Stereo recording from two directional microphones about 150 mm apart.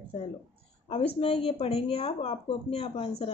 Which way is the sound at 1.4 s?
45° left (ahead or behind).